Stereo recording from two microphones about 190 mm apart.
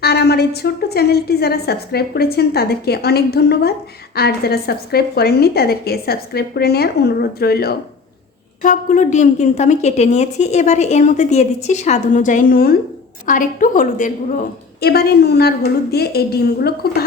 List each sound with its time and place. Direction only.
0.0 s a woman's voice: 60° left (ahead or behind)
8.6 s a woman's voice: 45° left (ahead or behind)